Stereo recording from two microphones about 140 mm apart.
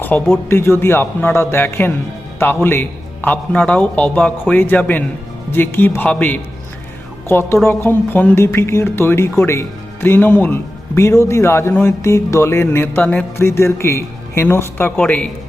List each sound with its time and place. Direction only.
0.0 s speech: 15° left (ahead or behind)